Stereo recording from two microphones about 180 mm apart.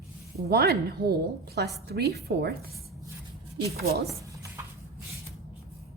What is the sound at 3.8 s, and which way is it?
Speech, 60° right (ahead or behind).